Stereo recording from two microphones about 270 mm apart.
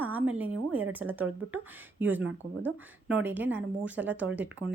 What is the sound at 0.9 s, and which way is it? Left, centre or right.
Speech, centre.